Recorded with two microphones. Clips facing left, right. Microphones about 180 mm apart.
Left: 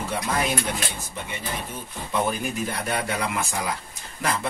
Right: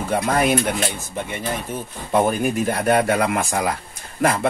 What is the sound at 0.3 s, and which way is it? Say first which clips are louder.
Speech: right 7 dB; 55° right (ahead or behind).